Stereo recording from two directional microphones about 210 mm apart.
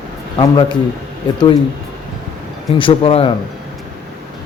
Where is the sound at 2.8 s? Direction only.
25° left (ahead or behind).